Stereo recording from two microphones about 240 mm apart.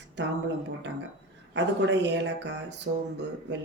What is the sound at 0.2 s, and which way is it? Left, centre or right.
Speech, right.